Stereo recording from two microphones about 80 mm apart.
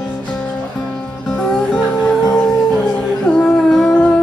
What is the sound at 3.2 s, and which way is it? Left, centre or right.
Music, centre.